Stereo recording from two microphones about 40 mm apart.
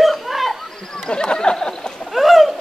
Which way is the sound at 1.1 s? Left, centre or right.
Left.